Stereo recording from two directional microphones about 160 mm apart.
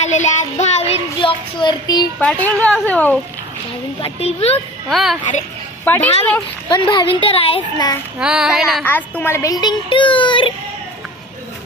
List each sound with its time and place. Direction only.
0.0 s speech: 45° left (ahead or behind); by 2.0 s 25° left (ahead or behind)
2.1 s a woman's voice: 10° left (ahead or behind)
4.0 s speech: 40° left (ahead or behind)
4.9 s child singing: centre (ahead or behind)
5.8 s a woman's voice: 10° left (ahead or behind)
6.7 s speech: 30° left (ahead or behind)
8.2 s child singing: 5° right (ahead or behind)
8.8 s speech: 10° left (ahead or behind); by 10.5 s 30° left (ahead or behind)